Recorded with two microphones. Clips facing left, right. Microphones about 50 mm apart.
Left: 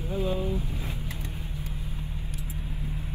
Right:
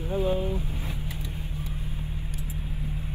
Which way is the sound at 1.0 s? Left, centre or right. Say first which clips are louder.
Right 1 dB; left.